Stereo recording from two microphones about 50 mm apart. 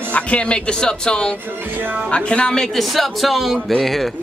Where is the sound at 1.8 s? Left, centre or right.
Right.